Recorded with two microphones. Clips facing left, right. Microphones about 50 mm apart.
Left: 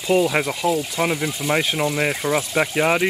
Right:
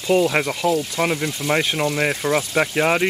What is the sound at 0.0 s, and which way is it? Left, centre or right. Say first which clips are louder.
Speech: right 1 dB; centre.